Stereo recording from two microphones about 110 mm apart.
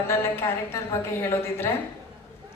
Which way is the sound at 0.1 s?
25° left (ahead or behind).